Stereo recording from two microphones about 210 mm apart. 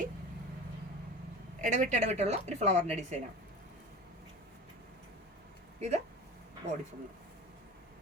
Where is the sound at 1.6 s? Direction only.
35° right (ahead or behind).